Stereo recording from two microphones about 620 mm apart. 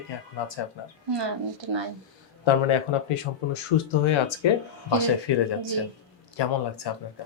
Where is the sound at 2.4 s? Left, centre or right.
Left.